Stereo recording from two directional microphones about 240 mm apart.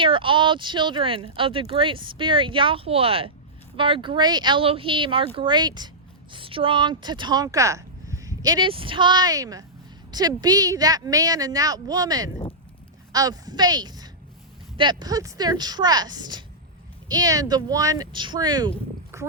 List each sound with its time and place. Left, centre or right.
0.0 s speech: right